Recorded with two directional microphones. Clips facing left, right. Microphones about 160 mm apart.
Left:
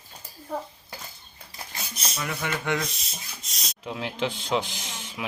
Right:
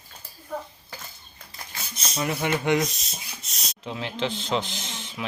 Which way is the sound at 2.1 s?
25° right (ahead or behind).